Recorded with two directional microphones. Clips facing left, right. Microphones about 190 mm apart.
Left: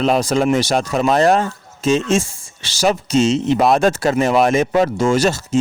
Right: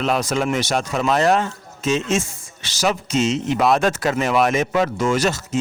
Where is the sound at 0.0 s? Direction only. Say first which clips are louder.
Left 5 dB; 35° left (ahead or behind).